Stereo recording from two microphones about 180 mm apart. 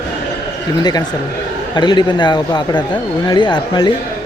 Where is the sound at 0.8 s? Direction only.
20° left (ahead or behind).